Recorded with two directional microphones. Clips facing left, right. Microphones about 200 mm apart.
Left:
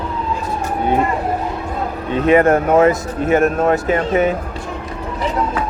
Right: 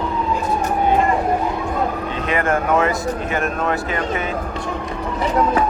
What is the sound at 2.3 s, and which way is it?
Speech, 40° left (ahead or behind).